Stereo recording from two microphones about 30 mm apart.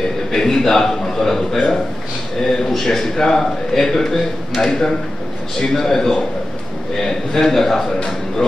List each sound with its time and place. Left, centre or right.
0.3 s a man's voice: centre
7.3 s a man's voice: centre